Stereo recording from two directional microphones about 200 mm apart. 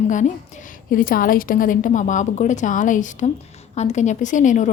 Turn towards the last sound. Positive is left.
turn(degrees=40)  # may be behind; listen again after turning